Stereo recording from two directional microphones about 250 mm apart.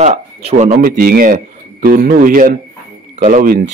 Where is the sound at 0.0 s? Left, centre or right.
Right.